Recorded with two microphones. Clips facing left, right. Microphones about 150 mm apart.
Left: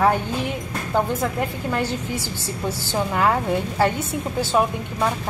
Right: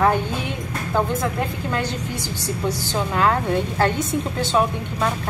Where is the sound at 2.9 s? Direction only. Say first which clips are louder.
Left 1 dB; 10° left (ahead or behind).